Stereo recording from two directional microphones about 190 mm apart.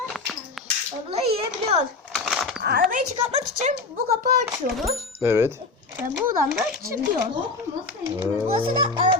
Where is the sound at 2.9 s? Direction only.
35° right (ahead or behind).